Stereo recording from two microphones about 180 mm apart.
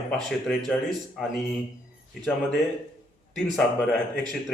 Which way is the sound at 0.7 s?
Centre (ahead or behind).